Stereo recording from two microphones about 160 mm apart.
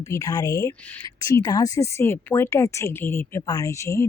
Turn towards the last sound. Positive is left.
turn(degrees=20)  # may be behind; listen again after turning